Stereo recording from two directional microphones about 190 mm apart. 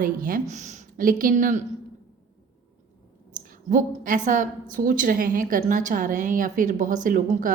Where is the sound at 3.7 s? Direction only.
45° right (ahead or behind).